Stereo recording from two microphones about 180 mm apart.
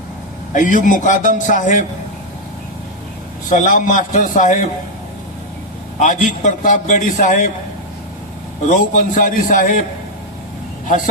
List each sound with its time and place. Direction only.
0.5 s a man's voice: 45° left (ahead or behind)
3.5 s a man's voice: 45° left (ahead or behind)
6.0 s a man's voice: 45° left (ahead or behind)
8.7 s a man's voice: 45° left (ahead or behind)
10.8 s speech: 45° left (ahead or behind)